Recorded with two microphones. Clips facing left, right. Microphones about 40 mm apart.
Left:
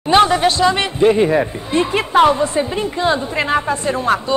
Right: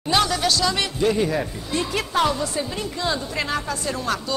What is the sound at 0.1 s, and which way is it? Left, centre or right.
Speech, left.